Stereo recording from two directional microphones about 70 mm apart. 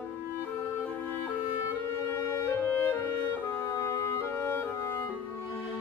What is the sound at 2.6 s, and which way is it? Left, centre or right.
Music, left.